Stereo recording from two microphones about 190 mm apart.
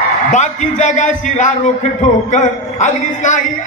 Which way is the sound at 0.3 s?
40° left (ahead or behind).